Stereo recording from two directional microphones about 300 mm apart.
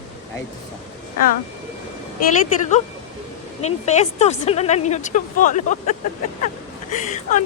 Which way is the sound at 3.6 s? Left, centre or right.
Left.